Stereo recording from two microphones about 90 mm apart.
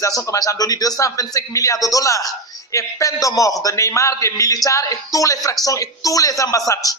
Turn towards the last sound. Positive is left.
turn(degrees=40)  # may be behind; listen again after turning